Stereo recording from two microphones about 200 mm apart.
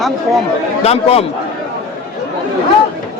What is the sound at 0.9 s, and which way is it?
Speech, 30° left (ahead or behind).